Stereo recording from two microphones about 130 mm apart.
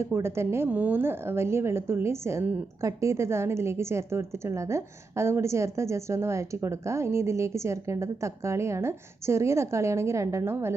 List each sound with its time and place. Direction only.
0.0 s a woman's voice: 20° right (ahead or behind)